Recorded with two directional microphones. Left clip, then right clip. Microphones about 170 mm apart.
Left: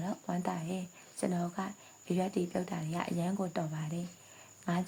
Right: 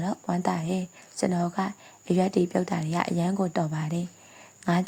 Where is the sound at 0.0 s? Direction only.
40° right (ahead or behind).